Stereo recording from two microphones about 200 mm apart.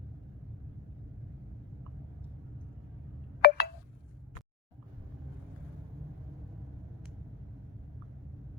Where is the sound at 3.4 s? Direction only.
50° left (ahead or behind).